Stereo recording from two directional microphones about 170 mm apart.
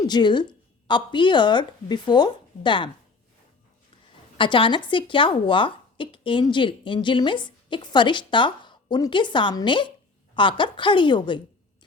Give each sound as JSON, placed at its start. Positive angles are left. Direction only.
{"t": 0.1, "sound": "a woman's voice", "side_deg": 25}
{"t": 4.4, "sound": "speech", "side_deg": 30}